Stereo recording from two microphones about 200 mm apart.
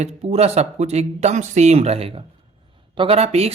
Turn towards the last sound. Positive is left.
turn(degrees=-30)  # may be behind; listen again after turning